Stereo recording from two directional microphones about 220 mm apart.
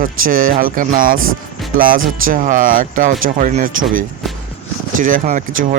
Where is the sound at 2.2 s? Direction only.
40° right (ahead or behind).